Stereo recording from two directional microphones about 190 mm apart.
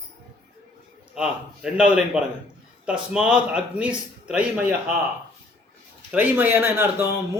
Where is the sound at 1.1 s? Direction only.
5° right (ahead or behind).